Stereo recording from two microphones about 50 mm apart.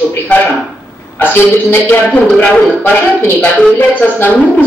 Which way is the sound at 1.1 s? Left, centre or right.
Left.